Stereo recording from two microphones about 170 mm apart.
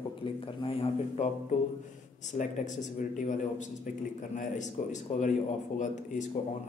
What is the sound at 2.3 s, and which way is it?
Speech, 45° left (ahead or behind).